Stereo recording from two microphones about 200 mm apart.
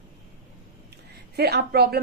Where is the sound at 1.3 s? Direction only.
55° right (ahead or behind).